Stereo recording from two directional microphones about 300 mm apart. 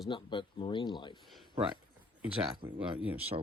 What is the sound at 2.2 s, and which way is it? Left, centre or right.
Speech, centre.